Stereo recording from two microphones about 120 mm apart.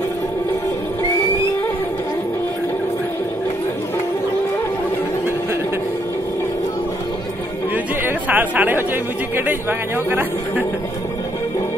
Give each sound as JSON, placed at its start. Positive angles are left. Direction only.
{"t": 7.7, "sound": "chatter", "side_deg": -15}
{"t": 9.5, "sound": "speech", "side_deg": -15}